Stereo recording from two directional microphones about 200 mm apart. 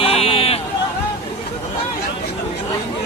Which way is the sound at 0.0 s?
30° left (ahead or behind).